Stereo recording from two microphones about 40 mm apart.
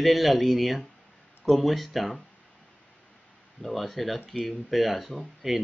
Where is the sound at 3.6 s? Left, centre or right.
Centre.